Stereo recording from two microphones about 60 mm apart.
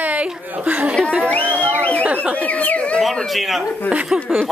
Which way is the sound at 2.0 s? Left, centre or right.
Right.